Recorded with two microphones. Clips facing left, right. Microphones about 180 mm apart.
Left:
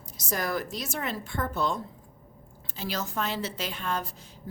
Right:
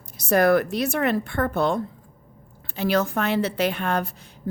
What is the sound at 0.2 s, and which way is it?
A woman's voice, 65° right (ahead or behind).